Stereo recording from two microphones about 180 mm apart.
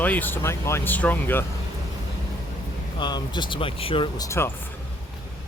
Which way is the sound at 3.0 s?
25° left (ahead or behind).